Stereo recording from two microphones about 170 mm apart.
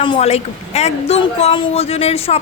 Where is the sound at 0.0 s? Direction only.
35° left (ahead or behind).